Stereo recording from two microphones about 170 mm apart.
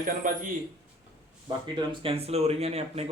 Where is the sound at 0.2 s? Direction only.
50° right (ahead or behind).